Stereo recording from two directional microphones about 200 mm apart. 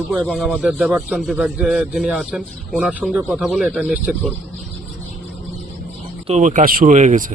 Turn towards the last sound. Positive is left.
turn(degrees=-40)  # may be behind; listen again after turning